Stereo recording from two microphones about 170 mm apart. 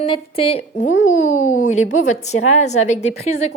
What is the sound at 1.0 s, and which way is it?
A woman's voice, 50° left (ahead or behind).